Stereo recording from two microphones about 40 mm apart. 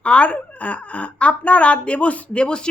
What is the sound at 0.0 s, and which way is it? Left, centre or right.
Speech, left.